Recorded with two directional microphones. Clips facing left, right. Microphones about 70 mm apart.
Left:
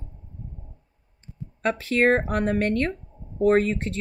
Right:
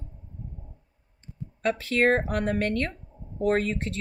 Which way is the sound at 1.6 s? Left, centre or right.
Left.